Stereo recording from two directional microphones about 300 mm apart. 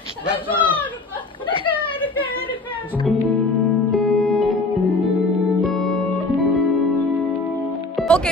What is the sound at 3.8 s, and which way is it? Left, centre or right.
Music, centre.